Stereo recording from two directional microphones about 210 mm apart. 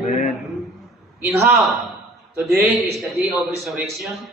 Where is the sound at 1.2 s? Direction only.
10° right (ahead or behind).